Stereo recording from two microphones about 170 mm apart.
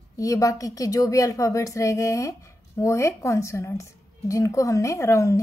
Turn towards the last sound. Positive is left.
turn(degrees=20)  # may be behind; listen again after turning